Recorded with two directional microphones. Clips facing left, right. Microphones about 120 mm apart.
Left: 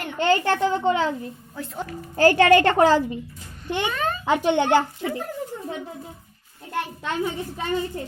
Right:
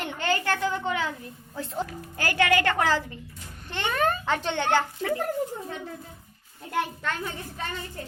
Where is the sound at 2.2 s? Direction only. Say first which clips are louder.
Left 9 dB; 30° left (ahead or behind).